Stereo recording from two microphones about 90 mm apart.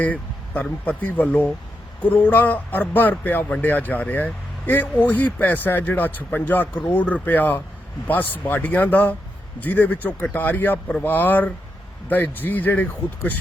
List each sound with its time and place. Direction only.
0.0 s speech: 15° left (ahead or behind)